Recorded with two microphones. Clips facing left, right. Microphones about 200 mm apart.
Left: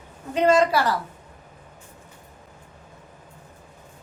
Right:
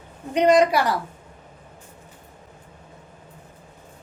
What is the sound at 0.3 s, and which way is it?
Speech, 20° right (ahead or behind).